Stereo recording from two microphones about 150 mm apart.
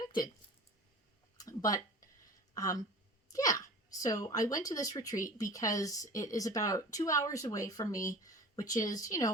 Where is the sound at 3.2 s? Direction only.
25° left (ahead or behind).